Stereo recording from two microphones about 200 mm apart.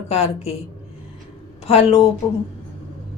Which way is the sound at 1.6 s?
30° left (ahead or behind).